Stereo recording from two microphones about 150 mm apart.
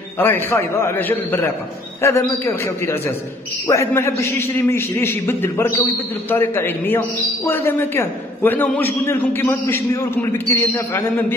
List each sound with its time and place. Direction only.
0.2 s a man's voice: 15° left (ahead or behind)